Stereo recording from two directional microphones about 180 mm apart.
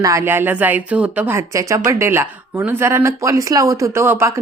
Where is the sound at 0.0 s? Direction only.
15° right (ahead or behind).